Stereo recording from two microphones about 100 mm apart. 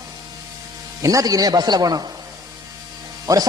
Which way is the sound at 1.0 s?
35° right (ahead or behind).